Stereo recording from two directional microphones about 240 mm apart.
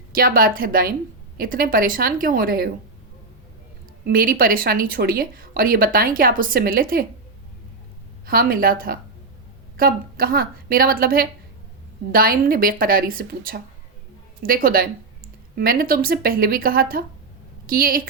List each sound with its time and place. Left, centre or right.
0.1 s speech: right
4.0 s speech: right
8.3 s speech: right